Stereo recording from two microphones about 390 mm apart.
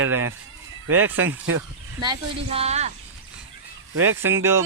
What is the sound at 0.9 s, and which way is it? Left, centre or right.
Speech, centre.